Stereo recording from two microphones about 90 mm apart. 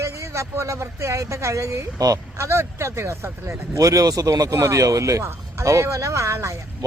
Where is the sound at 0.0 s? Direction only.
35° right (ahead or behind).